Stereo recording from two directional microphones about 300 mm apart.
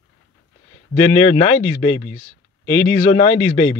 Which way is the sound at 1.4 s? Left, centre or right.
Left.